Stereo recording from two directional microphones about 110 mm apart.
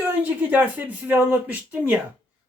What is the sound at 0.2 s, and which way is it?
Speech, 15° right (ahead or behind).